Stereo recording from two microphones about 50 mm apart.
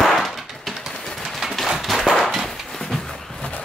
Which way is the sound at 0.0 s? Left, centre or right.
Centre.